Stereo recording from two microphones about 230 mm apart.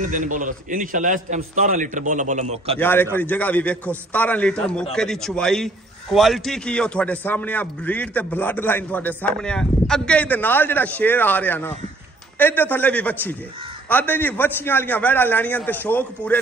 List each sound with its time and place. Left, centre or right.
0.0 s a man's voice: right
2.8 s a man's voice: centre